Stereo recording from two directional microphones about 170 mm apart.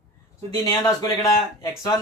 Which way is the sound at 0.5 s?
20° left (ahead or behind).